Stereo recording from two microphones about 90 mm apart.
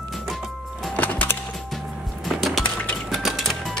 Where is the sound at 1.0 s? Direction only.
20° left (ahead or behind).